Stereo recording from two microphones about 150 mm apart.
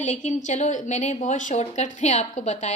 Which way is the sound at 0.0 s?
55° left (ahead or behind).